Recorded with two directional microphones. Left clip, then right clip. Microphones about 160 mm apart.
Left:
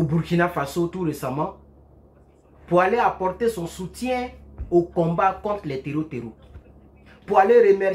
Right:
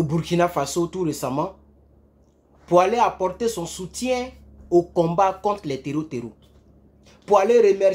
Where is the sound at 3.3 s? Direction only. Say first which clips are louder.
Left 1 dB; 25° right (ahead or behind).